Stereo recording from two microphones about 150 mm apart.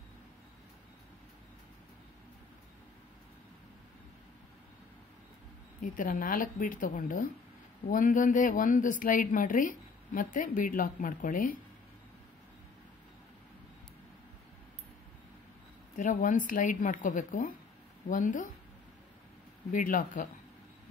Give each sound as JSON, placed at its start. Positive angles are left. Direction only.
{"t": 5.8, "sound": "a woman's voice", "side_deg": 65}
{"t": 16.0, "sound": "a woman's voice", "side_deg": 60}
{"t": 19.7, "sound": "a woman's voice", "side_deg": 60}